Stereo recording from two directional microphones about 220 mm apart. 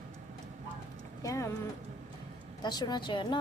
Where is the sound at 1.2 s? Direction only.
15° left (ahead or behind).